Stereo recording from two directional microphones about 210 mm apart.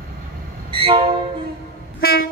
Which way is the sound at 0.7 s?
25° right (ahead or behind).